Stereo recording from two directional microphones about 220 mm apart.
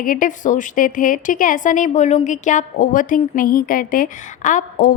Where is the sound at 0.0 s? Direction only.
40° left (ahead or behind).